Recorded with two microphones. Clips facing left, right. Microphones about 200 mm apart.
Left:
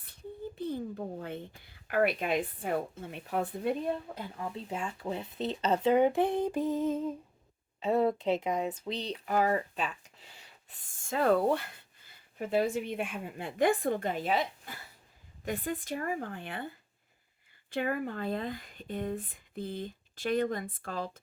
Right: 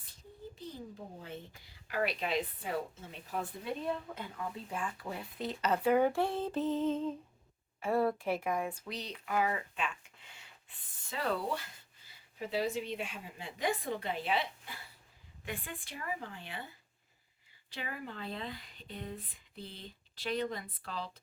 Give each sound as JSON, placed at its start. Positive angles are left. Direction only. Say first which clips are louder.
{"t": 0.0, "sound": "speech", "louder": "left 8 dB", "side_deg": 60}
{"t": 4.1, "sound": "speech", "louder": "left 3 dB", "side_deg": 30}
{"t": 7.8, "sound": "speech", "louder": "left 3 dB", "side_deg": 20}